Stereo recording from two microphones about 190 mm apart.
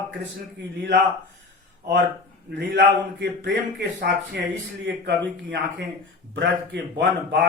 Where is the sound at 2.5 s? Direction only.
65° right (ahead or behind).